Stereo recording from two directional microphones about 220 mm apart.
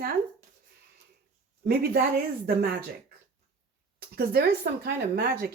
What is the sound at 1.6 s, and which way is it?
Speech, 45° right (ahead or behind).